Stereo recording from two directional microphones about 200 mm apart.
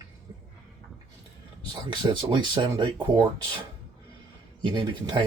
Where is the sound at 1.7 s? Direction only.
25° right (ahead or behind).